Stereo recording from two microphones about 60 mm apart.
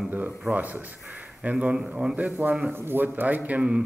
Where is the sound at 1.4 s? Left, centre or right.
Right.